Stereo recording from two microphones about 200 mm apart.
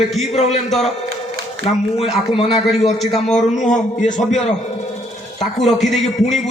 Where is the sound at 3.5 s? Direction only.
40° left (ahead or behind).